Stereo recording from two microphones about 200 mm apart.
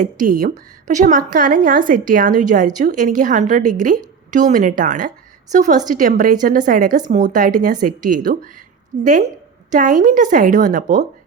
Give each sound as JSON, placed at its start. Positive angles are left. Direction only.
{"t": 0.0, "sound": "a woman's voice", "side_deg": -40}